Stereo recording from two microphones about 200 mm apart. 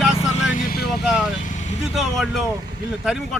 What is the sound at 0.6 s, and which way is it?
Vehicle, 50° left (ahead or behind).